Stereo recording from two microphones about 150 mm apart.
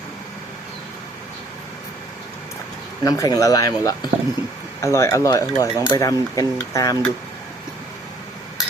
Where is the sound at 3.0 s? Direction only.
25° left (ahead or behind).